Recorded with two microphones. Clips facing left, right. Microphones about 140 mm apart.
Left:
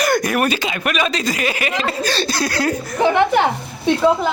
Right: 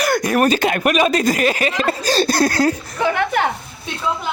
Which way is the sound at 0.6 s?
55° right (ahead or behind).